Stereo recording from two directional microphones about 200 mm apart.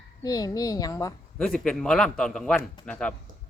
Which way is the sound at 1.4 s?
5° left (ahead or behind).